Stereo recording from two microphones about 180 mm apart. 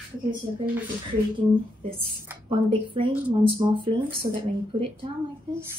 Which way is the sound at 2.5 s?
30° right (ahead or behind).